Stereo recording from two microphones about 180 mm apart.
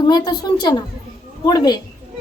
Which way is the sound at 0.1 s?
25° left (ahead or behind).